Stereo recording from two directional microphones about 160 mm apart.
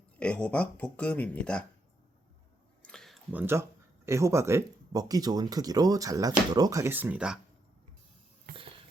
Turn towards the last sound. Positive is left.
turn(degrees=-10)  # may be behind; listen again after turning